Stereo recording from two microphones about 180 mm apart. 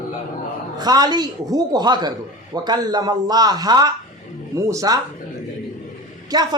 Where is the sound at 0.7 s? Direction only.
20° right (ahead or behind).